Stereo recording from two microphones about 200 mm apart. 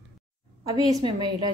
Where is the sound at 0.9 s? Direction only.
20° right (ahead or behind).